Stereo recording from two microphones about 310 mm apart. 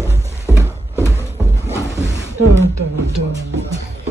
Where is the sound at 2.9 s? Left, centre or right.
Right.